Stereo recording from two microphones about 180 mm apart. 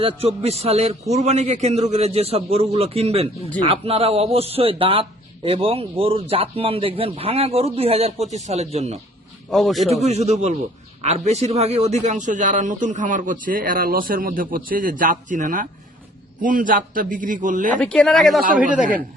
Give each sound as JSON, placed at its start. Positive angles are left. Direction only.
{"t": 0.0, "sound": "speech", "side_deg": -35}
{"t": 9.5, "sound": "speech", "side_deg": 0}
{"t": 9.8, "sound": "a man's voice", "side_deg": -35}
{"t": 17.7, "sound": "speech", "side_deg": 5}
{"t": 18.4, "sound": "a man's voice", "side_deg": -45}